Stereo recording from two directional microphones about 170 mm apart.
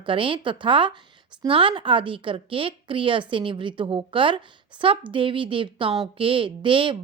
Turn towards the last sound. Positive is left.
turn(degrees=-30)  # may be behind; listen again after turning